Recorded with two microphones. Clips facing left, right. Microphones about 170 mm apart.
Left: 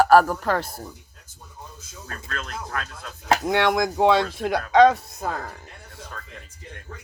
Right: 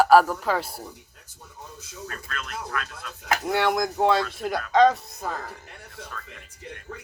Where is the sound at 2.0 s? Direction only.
35° left (ahead or behind).